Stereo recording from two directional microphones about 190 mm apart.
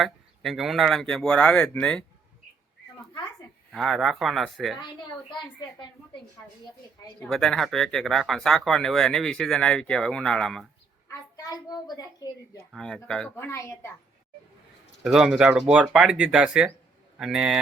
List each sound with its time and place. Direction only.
0.0 s speech: centre (ahead or behind)
3.7 s speech: centre (ahead or behind)
5.3 s a child's voice: 25° left (ahead or behind)
7.2 s speech: 5° left (ahead or behind)
11.4 s a child's voice: 20° left (ahead or behind)
12.7 s speech: 5° left (ahead or behind)
15.0 s speech: 5° right (ahead or behind)